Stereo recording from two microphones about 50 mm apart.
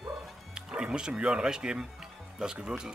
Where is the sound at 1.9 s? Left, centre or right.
Centre.